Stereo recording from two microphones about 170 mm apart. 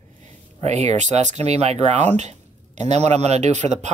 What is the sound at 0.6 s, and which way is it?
Speech, 40° right (ahead or behind).